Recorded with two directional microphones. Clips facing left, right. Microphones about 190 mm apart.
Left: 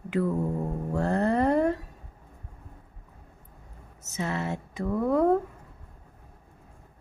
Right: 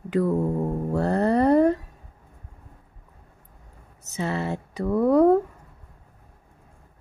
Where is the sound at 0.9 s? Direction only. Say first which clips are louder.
Right 3 dB; 35° right (ahead or behind).